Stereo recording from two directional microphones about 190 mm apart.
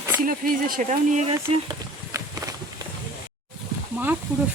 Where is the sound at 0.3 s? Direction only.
45° right (ahead or behind).